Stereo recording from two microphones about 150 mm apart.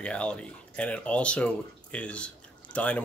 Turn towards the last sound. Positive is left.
turn(degrees=10)  # may be behind; listen again after turning